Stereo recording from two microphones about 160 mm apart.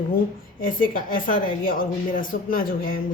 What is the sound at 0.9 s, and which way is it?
Speech, 60° left (ahead or behind).